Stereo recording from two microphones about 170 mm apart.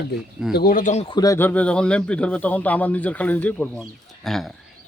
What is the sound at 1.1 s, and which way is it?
Speech, 20° left (ahead or behind).